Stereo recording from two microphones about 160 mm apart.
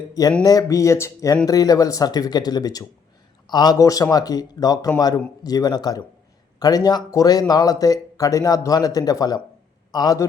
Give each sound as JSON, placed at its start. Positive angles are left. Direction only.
{"t": 0.1, "sound": "speech", "side_deg": 20}